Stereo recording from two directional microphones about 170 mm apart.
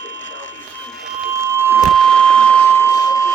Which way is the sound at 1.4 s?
15° right (ahead or behind).